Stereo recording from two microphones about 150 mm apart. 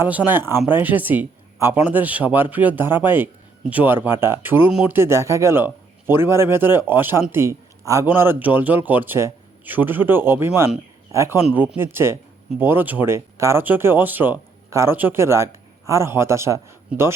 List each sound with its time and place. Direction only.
0.0 s speech: 10° right (ahead or behind)